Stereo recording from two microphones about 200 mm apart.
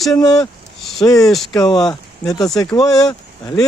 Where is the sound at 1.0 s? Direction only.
15° left (ahead or behind).